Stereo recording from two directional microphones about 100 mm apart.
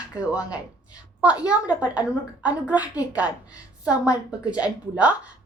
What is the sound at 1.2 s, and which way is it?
A woman's voice, 15° right (ahead or behind).